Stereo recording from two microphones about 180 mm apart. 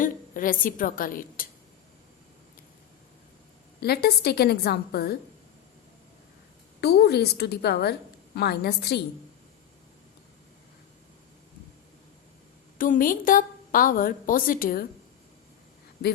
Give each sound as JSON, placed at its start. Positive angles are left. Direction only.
{"t": 0.0, "sound": "a woman's voice", "side_deg": 50}
{"t": 3.8, "sound": "a woman's voice", "side_deg": 60}
{"t": 6.8, "sound": "a woman's voice", "side_deg": 65}
{"t": 12.8, "sound": "a woman's voice", "side_deg": 50}